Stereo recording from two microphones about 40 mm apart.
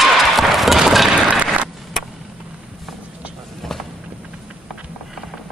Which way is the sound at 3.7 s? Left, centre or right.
Centre.